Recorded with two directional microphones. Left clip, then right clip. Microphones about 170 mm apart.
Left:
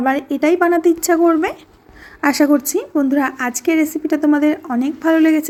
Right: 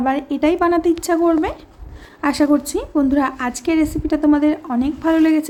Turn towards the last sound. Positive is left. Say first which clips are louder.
# left 2 dB
turn(degrees=15)  # may be behind; listen again after turning